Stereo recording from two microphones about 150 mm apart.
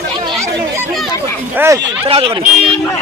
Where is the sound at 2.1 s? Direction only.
35° right (ahead or behind).